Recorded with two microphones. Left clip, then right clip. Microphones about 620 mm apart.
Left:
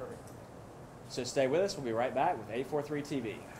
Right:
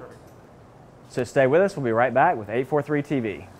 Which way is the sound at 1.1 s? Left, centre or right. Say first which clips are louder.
Right 11 dB; right.